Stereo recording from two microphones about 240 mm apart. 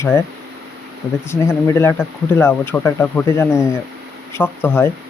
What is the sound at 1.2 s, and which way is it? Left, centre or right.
Speech, centre.